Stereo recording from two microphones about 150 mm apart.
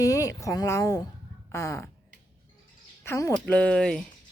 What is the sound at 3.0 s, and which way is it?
Speech, 15° left (ahead or behind).